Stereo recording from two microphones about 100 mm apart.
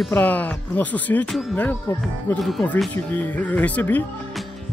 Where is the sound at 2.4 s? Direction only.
Centre (ahead or behind).